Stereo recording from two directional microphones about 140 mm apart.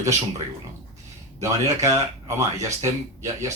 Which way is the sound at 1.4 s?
20° right (ahead or behind).